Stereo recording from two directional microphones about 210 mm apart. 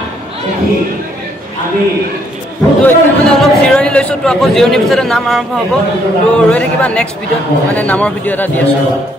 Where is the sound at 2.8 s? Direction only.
5° left (ahead or behind).